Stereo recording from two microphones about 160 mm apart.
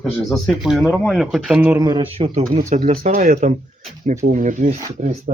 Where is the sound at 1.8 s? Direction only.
30° right (ahead or behind).